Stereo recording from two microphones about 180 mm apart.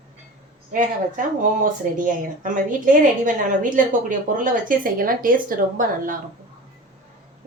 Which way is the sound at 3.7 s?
45° right (ahead or behind).